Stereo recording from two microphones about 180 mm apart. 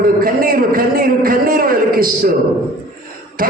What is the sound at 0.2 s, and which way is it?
A man's voice, 55° right (ahead or behind).